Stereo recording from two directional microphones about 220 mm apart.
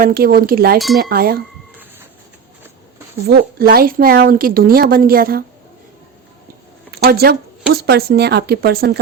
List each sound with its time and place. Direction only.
0.0 s a woman's voice: 45° right (ahead or behind)
3.2 s a woman's voice: 45° right (ahead or behind)
7.0 s a woman's voice: 45° right (ahead or behind)